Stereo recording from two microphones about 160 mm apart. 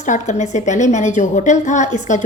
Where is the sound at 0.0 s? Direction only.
45° left (ahead or behind).